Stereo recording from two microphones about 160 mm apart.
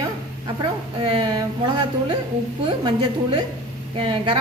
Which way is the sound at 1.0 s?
35° right (ahead or behind).